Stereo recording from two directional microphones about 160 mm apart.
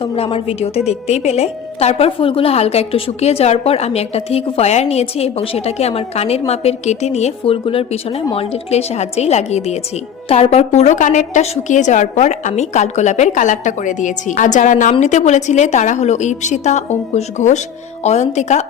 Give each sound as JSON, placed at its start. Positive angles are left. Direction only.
{"t": 0.0, "sound": "a woman's voice", "side_deg": 35}